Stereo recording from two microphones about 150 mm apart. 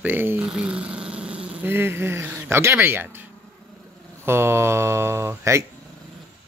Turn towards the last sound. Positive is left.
turn(degrees=-20)  # may be behind; listen again after turning